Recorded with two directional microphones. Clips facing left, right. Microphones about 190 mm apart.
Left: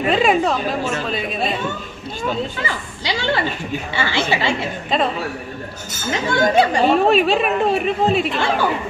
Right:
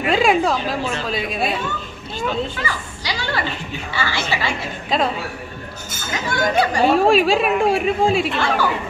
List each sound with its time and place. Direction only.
0.0 s speech: centre (ahead or behind)
2.6 s a woman's voice: 20° left (ahead or behind)
6.3 s a woman's voice: 25° left (ahead or behind)
6.8 s speech: 5° right (ahead or behind)